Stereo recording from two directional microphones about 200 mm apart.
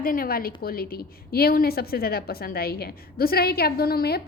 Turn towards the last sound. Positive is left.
turn(degrees=50)  # may be behind; listen again after turning